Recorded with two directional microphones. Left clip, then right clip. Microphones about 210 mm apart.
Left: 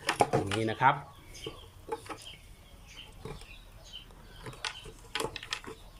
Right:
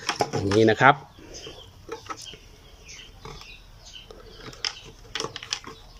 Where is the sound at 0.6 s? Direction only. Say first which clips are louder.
Right 11 dB; 45° right (ahead or behind).